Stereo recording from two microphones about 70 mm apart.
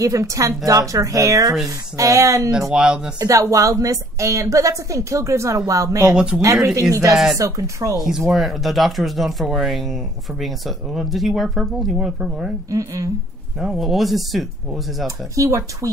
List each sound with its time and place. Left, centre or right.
0.0 s a woman's voice: right
2.7 s speech: centre
3.2 s a woman's voice: right
6.1 s speech: centre
6.4 s a woman's voice: right
8.3 s speech: centre
12.6 s a woman's voice: right
13.6 s speech: centre
15.0 s a woman's voice: right